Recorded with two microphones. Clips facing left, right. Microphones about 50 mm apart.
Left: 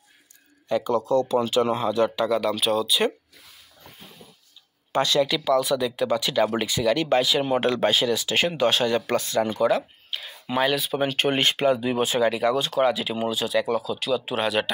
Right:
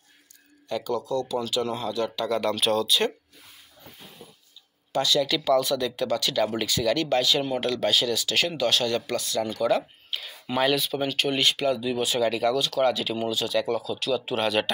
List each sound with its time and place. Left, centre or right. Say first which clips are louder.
0.7 s speech: left 5 dB; left
0.9 s speech: left 6 dB; left
2.2 s speech: left 2 dB; centre
4.9 s speech: left 2 dB; left
5.4 s speech: left 1 dB; centre
7.4 s speech: left 4 dB; left
9.7 s speech: left 1 dB; centre
11.0 s speech: left 3 dB; left
11.2 s speech: left 3 dB; left
12.2 s speech: left 1 dB; centre
12.5 s speech: left 2 dB; left
12.8 s speech: left 1 dB; centre